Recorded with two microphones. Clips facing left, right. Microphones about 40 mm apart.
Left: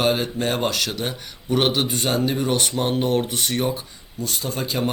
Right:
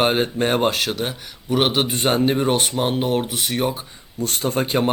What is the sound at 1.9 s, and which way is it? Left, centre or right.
Speech, right.